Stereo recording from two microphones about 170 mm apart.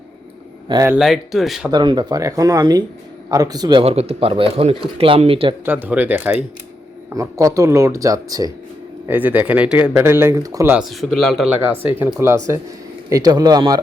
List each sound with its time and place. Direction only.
0.7 s speech: 20° right (ahead or behind)
0.9 s speech: centre (ahead or behind)
1.7 s a man's voice: 25° right (ahead or behind)
5.6 s speech: 10° right (ahead or behind)
9.0 s speech: 10° right (ahead or behind)
10.8 s speech: centre (ahead or behind)
11.4 s speech: 10° right (ahead or behind)